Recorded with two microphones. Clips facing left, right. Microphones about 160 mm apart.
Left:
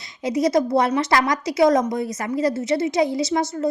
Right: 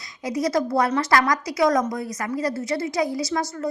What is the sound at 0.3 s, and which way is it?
A woman's voice, 20° left (ahead or behind).